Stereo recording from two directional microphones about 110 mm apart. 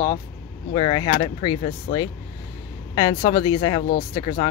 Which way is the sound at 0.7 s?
50° left (ahead or behind).